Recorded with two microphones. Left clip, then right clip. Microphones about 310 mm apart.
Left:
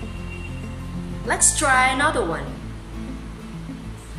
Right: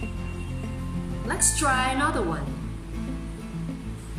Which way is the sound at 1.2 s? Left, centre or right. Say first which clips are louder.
Left 5 dB; centre.